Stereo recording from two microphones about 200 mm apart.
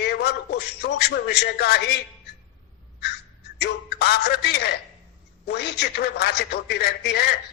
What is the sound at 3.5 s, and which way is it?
A man's voice, 55° left (ahead or behind).